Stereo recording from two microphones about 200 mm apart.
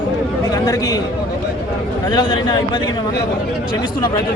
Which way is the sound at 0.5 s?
15° left (ahead or behind).